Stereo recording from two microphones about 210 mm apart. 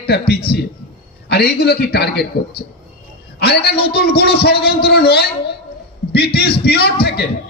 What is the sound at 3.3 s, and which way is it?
A man's voice, 50° left (ahead or behind).